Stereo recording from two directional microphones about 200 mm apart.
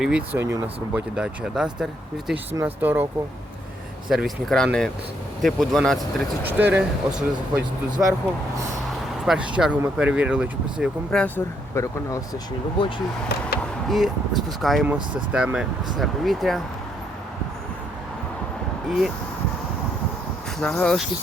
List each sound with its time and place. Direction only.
0.0 s speech: 5° right (ahead or behind)
4.1 s speech: centre (ahead or behind)
9.2 s speech: centre (ahead or behind)
11.2 s speech: 10° left (ahead or behind)
12.8 s speech: 25° left (ahead or behind)
13.6 s skateboard: centre (ahead or behind)
14.6 s speech: centre (ahead or behind)
18.9 s speech: centre (ahead or behind)
20.6 s speech: 5° left (ahead or behind)